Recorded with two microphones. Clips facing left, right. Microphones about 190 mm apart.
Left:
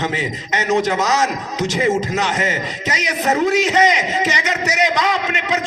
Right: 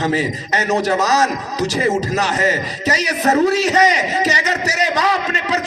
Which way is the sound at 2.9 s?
20° left (ahead or behind).